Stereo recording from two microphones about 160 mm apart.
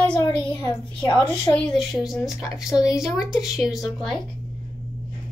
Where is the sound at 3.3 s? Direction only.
Centre (ahead or behind).